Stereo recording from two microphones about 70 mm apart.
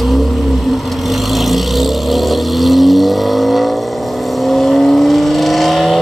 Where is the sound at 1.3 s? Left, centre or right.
Centre.